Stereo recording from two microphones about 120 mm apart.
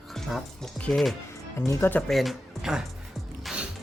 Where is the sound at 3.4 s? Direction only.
10° right (ahead or behind).